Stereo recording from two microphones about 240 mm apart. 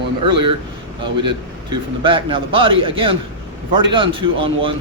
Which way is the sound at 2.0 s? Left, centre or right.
Right.